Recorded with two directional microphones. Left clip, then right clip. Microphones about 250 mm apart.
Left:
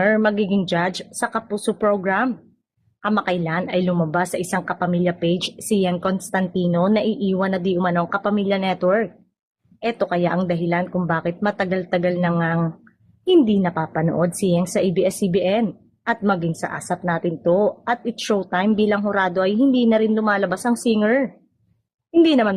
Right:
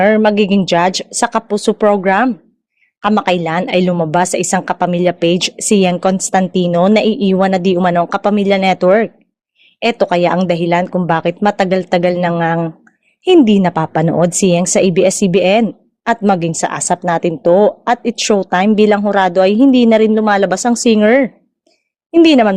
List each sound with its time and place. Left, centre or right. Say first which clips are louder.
0.0 s a woman's voice: right 8 dB; right